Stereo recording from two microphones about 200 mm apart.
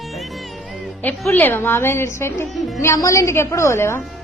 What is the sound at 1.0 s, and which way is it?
A woman's voice, 10° left (ahead or behind).